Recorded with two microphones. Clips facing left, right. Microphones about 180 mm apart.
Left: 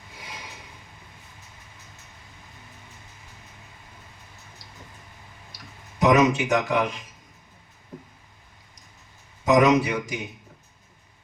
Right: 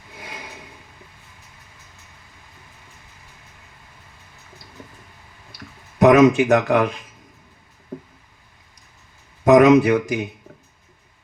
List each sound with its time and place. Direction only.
0.2 s a sound: 60° right (ahead or behind)
6.0 s speech: 55° right (ahead or behind)
9.4 s a man's voice: 55° right (ahead or behind)